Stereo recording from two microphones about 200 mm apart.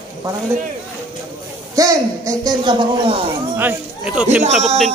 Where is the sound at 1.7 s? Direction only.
15° right (ahead or behind).